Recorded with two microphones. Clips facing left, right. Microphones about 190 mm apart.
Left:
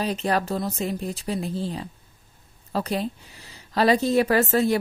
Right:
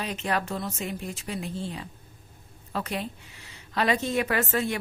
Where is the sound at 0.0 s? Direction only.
35° left (ahead or behind).